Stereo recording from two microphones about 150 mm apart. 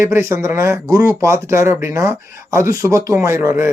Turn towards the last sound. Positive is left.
turn(degrees=-20)  # may be behind; listen again after turning